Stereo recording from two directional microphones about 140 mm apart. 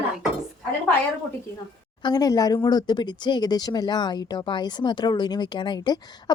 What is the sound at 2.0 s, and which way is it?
Speech, 30° left (ahead or behind).